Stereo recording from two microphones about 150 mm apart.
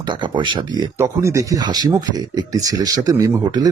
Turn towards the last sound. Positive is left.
turn(degrees=-25)  # may be behind; listen again after turning